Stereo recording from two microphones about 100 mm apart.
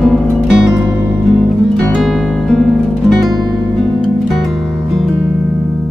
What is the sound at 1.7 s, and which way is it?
Music, 5° left (ahead or behind).